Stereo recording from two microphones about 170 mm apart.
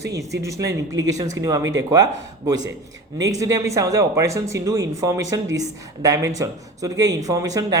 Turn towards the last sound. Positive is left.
turn(degrees=-20)  # may be behind; listen again after turning